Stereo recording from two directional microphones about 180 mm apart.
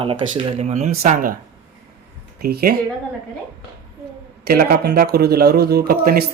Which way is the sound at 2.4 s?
60° right (ahead or behind).